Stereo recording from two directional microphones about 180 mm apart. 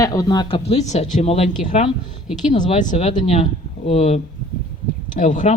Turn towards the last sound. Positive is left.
turn(degrees=45)  # may be behind; listen again after turning